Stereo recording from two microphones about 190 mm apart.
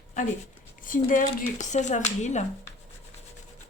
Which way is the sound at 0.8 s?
45° left (ahead or behind).